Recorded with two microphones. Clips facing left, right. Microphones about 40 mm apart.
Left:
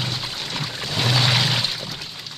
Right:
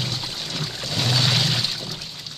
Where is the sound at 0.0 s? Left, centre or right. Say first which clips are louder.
Left 1 dB; centre.